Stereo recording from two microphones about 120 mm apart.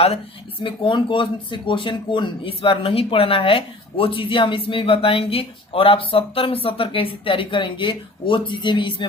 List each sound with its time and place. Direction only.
0.6 s speech: 45° left (ahead or behind)